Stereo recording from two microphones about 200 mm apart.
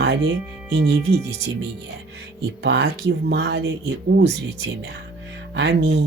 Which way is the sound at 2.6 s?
60° right (ahead or behind).